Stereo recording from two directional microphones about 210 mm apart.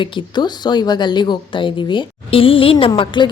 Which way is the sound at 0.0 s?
20° left (ahead or behind).